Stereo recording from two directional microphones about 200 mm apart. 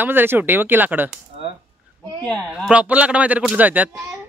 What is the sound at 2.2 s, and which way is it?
Speech, 5° right (ahead or behind).